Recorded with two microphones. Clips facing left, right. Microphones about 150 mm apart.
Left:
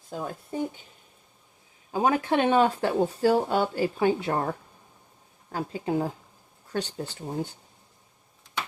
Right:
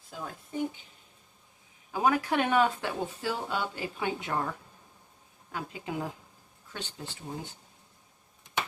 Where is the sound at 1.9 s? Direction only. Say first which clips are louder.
Left 3 dB; 25° left (ahead or behind).